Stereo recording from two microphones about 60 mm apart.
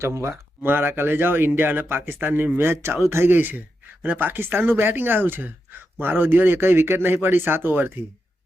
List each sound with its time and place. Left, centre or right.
0.0 s speech: right
0.6 s a man's voice: right
3.3 s a man's voice: right